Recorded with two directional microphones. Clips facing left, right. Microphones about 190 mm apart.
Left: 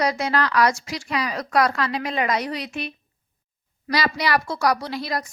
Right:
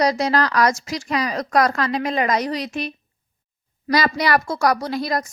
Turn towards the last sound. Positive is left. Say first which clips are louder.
# right 4 dB
turn(degrees=-45)  # may be behind; listen again after turning